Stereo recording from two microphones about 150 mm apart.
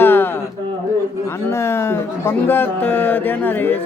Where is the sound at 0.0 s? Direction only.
15° left (ahead or behind).